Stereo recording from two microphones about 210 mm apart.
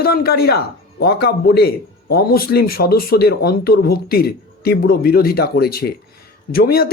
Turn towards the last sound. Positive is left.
turn(degrees=45)  # may be behind; listen again after turning